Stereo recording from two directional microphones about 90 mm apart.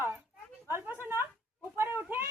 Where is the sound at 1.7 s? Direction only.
20° right (ahead or behind).